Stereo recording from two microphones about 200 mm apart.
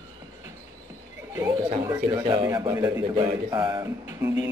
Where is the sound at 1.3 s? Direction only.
15° right (ahead or behind).